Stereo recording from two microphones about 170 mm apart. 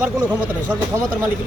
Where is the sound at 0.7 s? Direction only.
15° right (ahead or behind).